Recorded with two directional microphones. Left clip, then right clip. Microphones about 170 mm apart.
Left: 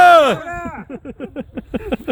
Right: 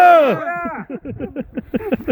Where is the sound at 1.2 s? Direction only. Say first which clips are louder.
Right 1 dB; 25° left (ahead or behind).